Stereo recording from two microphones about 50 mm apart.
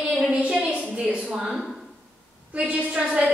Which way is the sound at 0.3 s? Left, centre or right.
Right.